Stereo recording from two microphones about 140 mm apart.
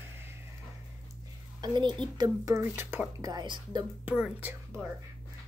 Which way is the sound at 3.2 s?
30° right (ahead or behind).